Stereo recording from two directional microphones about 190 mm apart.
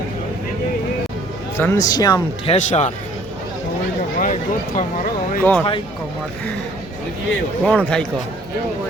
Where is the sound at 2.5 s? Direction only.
35° left (ahead or behind).